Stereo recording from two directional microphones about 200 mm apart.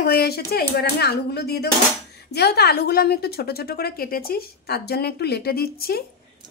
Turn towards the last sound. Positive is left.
turn(degrees=50)  # may be behind; listen again after turning